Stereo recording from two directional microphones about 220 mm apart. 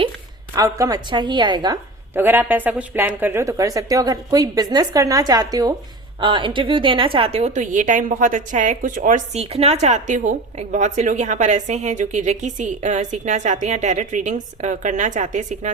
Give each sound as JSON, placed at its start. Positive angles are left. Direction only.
{"t": 0.5, "sound": "a woman's voice", "side_deg": -15}